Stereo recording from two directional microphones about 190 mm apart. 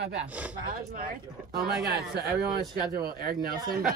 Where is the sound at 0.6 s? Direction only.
50° right (ahead or behind).